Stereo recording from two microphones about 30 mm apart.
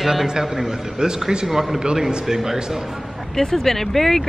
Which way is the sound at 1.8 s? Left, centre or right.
Right.